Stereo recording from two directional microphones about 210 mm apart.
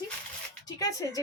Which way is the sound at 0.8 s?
15° left (ahead or behind).